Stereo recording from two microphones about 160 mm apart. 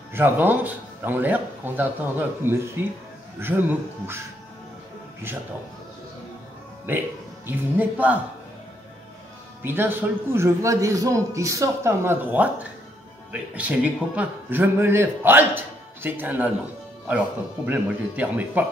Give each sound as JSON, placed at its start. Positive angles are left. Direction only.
{"t": 0.1, "sound": "a man's voice", "side_deg": -10}
{"t": 6.9, "sound": "a man's voice", "side_deg": -10}
{"t": 9.6, "sound": "a man's voice", "side_deg": -15}
{"t": 17.6, "sound": "a man's voice", "side_deg": -10}